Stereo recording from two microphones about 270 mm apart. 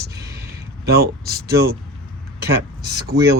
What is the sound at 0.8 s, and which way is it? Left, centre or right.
Speech, right.